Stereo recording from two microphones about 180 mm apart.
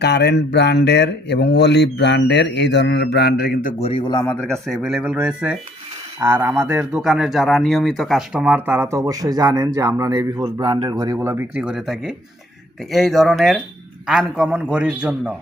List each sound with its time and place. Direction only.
0.0 s speech: 65° left (ahead or behind); by 3.8 s 50° left (ahead or behind)
3.8 s a man's voice: 30° left (ahead or behind)
4.1 s a man's voice: 10° left (ahead or behind); by 15.4 s 5° right (ahead or behind)